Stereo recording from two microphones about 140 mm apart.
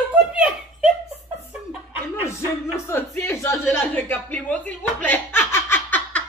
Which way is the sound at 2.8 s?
20° left (ahead or behind).